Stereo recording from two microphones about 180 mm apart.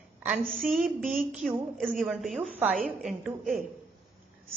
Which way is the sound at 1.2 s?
5° right (ahead or behind).